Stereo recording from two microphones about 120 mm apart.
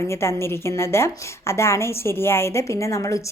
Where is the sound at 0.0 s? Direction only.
20° left (ahead or behind).